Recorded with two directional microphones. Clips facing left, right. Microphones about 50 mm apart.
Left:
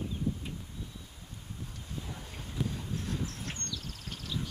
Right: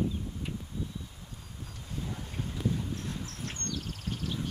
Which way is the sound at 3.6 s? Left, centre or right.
Right.